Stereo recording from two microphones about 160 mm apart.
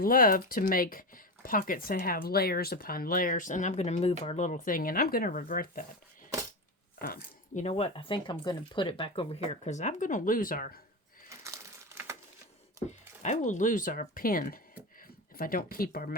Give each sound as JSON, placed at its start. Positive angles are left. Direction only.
{"t": 0.0, "sound": "speech", "side_deg": 60}
{"t": 7.0, "sound": "speech", "side_deg": 65}
{"t": 7.6, "sound": "speech", "side_deg": 40}
{"t": 11.3, "sound": "a sound", "side_deg": -20}
{"t": 13.2, "sound": "speech", "side_deg": 50}